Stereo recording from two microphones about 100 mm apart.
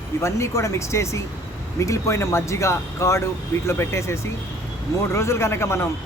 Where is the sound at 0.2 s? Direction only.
30° left (ahead or behind).